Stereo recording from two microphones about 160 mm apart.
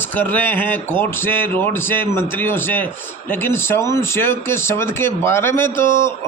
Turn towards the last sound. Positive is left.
turn(degrees=15)  # may be behind; listen again after turning